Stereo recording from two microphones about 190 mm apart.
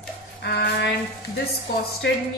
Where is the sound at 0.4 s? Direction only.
60° left (ahead or behind).